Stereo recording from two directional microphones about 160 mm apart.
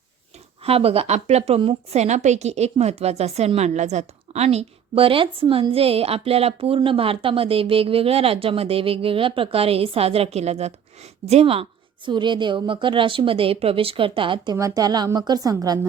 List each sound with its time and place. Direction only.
0.6 s a woman's voice: 40° right (ahead or behind); by 15.9 s 20° right (ahead or behind)